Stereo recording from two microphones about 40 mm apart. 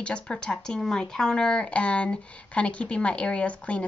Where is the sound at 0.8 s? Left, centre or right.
Centre.